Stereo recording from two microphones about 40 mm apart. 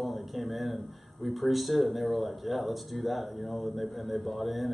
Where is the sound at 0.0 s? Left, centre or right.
Centre.